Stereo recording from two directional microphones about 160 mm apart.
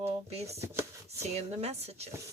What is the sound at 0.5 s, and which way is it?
Speech, 15° right (ahead or behind).